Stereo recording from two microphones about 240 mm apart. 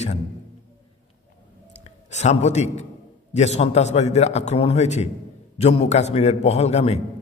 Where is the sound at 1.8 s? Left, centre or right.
Left.